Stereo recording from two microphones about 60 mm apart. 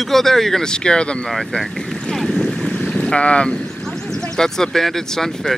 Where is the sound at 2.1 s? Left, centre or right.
Centre.